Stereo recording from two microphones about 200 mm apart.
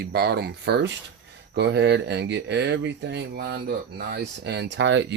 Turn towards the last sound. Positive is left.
turn(degrees=-65)  # may be behind; listen again after turning